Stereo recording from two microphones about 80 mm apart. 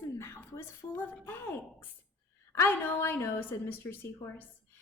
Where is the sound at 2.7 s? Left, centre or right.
Left.